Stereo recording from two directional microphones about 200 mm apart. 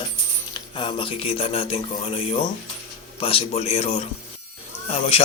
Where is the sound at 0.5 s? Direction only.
25° left (ahead or behind).